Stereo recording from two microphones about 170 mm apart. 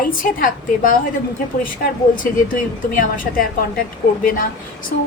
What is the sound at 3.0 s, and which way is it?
Speech, 55° left (ahead or behind).